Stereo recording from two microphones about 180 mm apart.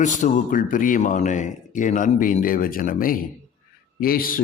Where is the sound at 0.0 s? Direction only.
45° left (ahead or behind).